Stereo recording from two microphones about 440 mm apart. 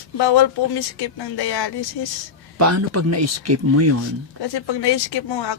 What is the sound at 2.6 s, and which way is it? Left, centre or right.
Speech, right.